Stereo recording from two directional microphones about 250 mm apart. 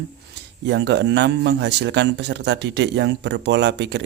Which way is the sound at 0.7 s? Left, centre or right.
Right.